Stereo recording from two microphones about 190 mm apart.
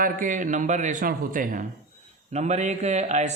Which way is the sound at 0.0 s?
45° right (ahead or behind).